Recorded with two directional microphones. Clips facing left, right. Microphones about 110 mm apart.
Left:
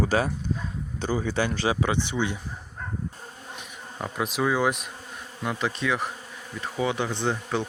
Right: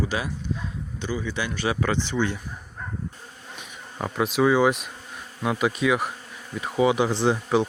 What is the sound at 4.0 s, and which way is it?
Speech, centre (ahead or behind).